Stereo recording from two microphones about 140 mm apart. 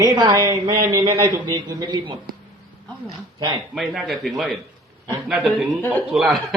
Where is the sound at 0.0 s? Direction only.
30° right (ahead or behind).